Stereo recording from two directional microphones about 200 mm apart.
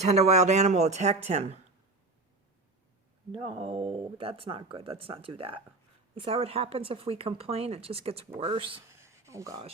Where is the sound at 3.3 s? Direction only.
25° right (ahead or behind).